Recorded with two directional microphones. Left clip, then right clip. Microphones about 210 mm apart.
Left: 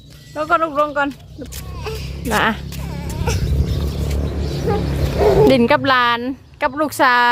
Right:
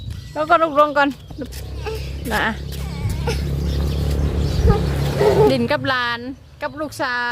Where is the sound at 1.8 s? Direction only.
55° left (ahead or behind).